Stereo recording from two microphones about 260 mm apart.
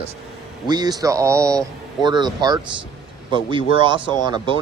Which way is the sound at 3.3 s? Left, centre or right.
Centre.